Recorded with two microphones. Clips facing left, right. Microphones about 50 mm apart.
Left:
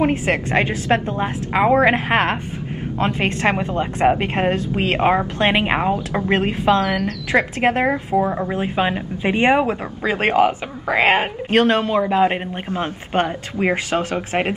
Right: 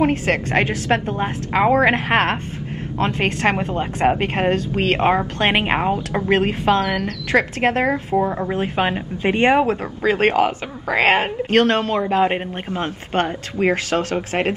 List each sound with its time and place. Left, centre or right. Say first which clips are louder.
0.0 s a woman's voice: even; centre
1.5 s a woman's voice: left 1 dB; centre
7.3 s speech: even; centre
8.1 s a woman's voice: even; centre
8.7 s speech: left 1 dB; centre
9.2 s speech: right 1 dB; centre